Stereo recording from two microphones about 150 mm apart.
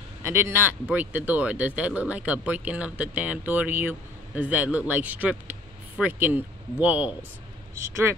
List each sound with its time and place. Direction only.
0.2 s speech: 15° right (ahead or behind)